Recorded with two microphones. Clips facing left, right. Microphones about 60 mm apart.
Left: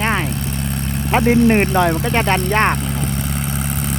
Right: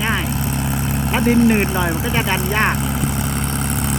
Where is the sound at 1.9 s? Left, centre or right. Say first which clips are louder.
Left 2 dB; centre.